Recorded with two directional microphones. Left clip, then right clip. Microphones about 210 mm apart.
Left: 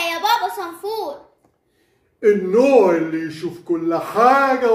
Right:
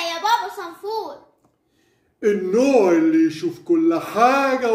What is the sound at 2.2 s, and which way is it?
Speech, 35° right (ahead or behind).